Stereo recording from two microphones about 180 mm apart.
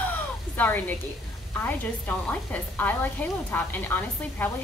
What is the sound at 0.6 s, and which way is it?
Speech, 10° left (ahead or behind).